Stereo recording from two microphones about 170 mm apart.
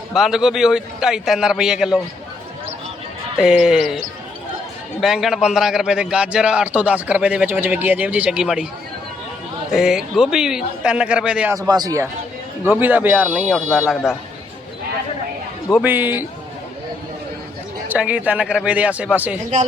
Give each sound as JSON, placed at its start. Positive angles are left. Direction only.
{"t": 0.1, "sound": "a man's voice", "side_deg": 0}
{"t": 3.3, "sound": "a man's voice", "side_deg": -5}
{"t": 9.7, "sound": "a man's voice", "side_deg": -5}
{"t": 11.5, "sound": "a man's voice", "side_deg": -20}
{"t": 12.6, "sound": "a man's voice", "side_deg": -10}
{"t": 15.8, "sound": "a man's voice", "side_deg": -10}
{"t": 17.8, "sound": "a man's voice", "side_deg": -10}